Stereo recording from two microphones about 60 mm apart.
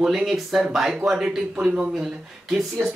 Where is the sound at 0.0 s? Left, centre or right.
Centre.